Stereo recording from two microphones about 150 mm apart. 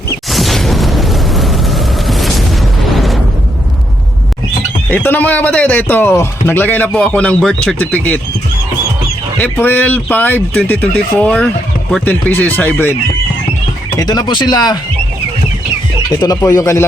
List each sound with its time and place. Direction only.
0.3 s boom: centre (ahead or behind)
2.9 s explosion: centre (ahead or behind)
4.9 s speech: 10° left (ahead or behind)
9.4 s speech: 10° left (ahead or behind)
14.0 s speech: 25° left (ahead or behind)
16.2 s speech: 25° left (ahead or behind)